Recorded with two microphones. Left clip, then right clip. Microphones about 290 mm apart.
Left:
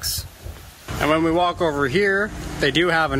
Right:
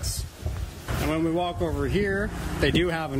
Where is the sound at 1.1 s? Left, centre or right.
Centre.